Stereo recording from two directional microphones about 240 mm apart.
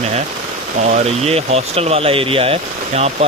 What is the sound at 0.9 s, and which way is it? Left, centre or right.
Speech, right.